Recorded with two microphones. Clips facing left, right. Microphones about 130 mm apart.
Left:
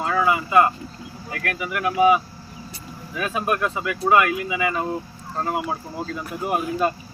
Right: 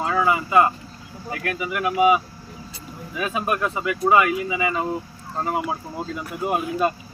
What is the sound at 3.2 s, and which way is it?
Speech, 5° right (ahead or behind).